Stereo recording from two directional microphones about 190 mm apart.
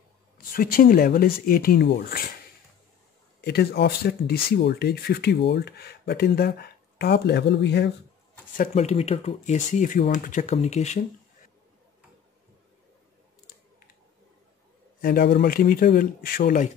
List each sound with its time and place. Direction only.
0.4 s speech: 50° left (ahead or behind)
3.3 s speech: 60° left (ahead or behind)
8.5 s speech: 35° left (ahead or behind)
15.0 s speech: 50° left (ahead or behind)